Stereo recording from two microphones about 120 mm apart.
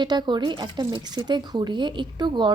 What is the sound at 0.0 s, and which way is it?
Speech, 40° right (ahead or behind).